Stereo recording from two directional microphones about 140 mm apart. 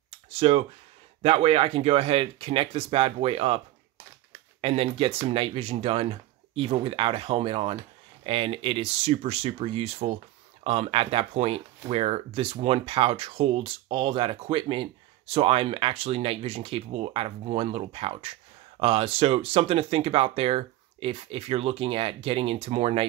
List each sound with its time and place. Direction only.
0.3 s speech: 45° right (ahead or behind)